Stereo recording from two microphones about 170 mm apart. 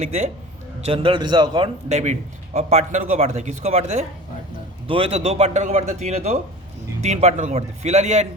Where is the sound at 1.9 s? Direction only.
40° right (ahead or behind).